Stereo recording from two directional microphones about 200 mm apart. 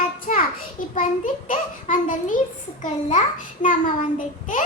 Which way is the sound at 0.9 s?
40° left (ahead or behind).